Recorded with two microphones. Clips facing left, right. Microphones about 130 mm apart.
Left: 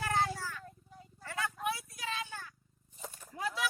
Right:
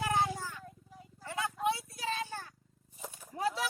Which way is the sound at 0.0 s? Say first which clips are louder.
Right 1 dB; 15° right (ahead or behind).